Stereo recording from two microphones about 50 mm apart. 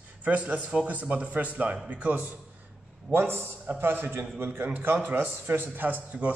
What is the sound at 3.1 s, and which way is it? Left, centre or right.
A man's voice, right.